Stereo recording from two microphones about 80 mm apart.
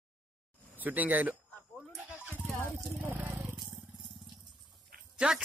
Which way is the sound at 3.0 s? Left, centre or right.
Right.